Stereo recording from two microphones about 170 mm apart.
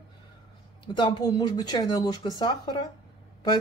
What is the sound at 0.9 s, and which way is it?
A man's voice, 25° left (ahead or behind).